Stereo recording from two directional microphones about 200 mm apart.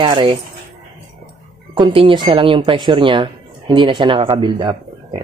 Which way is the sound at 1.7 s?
25° right (ahead or behind).